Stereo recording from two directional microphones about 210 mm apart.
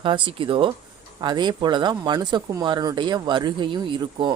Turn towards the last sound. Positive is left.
turn(degrees=-20)  # may be behind; listen again after turning